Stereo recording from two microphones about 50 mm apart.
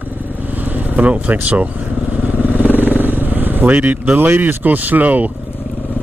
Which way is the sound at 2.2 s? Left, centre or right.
Right.